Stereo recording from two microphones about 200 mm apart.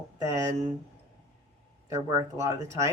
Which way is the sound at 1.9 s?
15° right (ahead or behind).